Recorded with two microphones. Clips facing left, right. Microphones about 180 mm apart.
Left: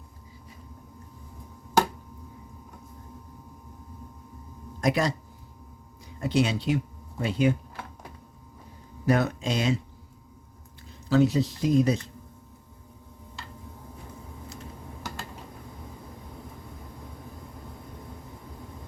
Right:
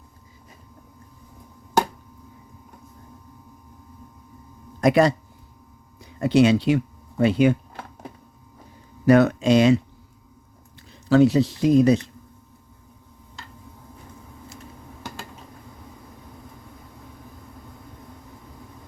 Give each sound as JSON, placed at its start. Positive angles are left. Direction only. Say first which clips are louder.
{"t": 4.8, "sound": "speech", "louder": "right 8 dB", "side_deg": -60}
{"t": 6.1, "sound": "speech", "louder": "right 8 dB", "side_deg": -70}
{"t": 9.0, "sound": "speech", "louder": "right 9 dB", "side_deg": -70}
{"t": 11.1, "sound": "speech", "louder": "right 6 dB", "side_deg": -75}